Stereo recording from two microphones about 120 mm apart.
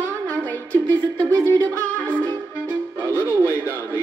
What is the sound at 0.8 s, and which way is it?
Music, 30° right (ahead or behind).